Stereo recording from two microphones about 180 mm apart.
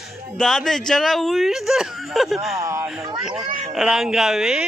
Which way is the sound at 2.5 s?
15° right (ahead or behind).